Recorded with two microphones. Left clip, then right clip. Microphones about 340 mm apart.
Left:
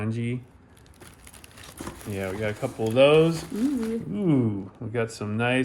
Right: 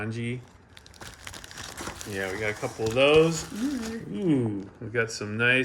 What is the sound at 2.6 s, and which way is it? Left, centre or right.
Speech, left.